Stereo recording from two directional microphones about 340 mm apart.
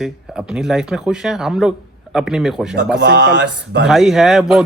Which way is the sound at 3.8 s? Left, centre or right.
Centre.